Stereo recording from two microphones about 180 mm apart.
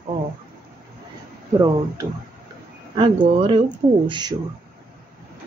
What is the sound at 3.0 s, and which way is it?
Speech, 30° right (ahead or behind).